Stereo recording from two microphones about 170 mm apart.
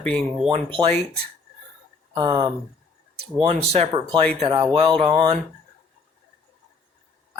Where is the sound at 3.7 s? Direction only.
40° right (ahead or behind).